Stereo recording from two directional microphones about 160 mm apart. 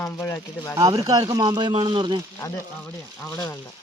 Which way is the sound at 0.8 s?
20° right (ahead or behind).